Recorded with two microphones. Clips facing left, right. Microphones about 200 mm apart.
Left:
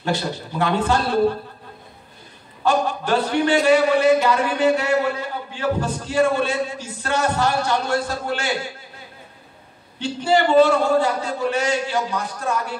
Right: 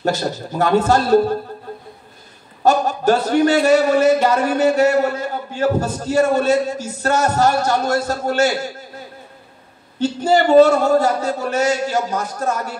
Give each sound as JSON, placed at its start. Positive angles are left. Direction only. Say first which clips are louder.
{"t": 0.0, "sound": "a man's voice", "louder": "right 4 dB", "side_deg": -40}
{"t": 2.6, "sound": "a man's voice", "louder": "right 5 dB", "side_deg": -40}
{"t": 9.9, "sound": "a man's voice", "louder": "right 3 dB", "side_deg": -40}